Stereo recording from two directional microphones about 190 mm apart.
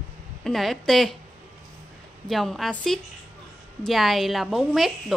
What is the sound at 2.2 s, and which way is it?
A woman's voice, centre (ahead or behind).